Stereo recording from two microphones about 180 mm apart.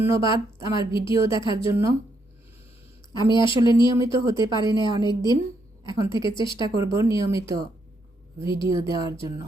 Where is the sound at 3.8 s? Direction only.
20° right (ahead or behind).